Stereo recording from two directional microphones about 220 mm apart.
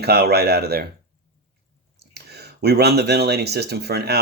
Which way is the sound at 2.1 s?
45° right (ahead or behind).